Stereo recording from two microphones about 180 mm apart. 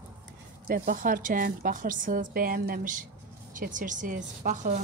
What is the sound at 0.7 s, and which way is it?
A woman's voice, 55° right (ahead or behind).